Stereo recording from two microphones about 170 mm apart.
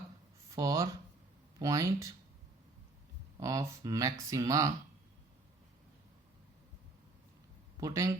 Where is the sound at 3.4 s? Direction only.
20° right (ahead or behind).